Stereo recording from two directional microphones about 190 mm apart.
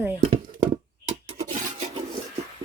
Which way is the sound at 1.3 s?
35° right (ahead or behind).